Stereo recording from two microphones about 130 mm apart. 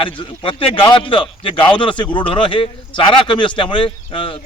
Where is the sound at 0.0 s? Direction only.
40° left (ahead or behind).